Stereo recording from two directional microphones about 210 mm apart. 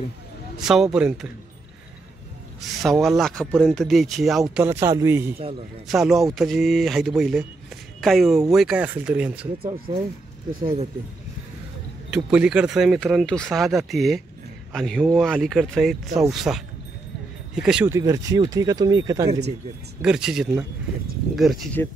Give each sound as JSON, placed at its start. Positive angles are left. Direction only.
{"t": 0.6, "sound": "speech", "side_deg": 0}
{"t": 2.8, "sound": "speech", "side_deg": 0}
{"t": 4.6, "sound": "speech", "side_deg": -15}
{"t": 5.9, "sound": "speech", "side_deg": 0}
{"t": 10.6, "sound": "speech", "side_deg": -25}
{"t": 12.1, "sound": "a man's voice", "side_deg": -5}
{"t": 17.9, "sound": "speech", "side_deg": -15}
{"t": 20.0, "sound": "speech", "side_deg": -5}